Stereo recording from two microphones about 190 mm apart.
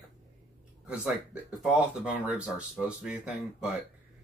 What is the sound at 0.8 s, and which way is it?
Speech, 5° right (ahead or behind).